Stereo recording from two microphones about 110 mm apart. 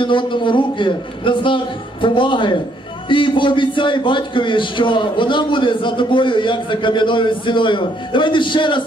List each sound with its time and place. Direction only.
0.0 s a man's voice: 50° left (ahead or behind)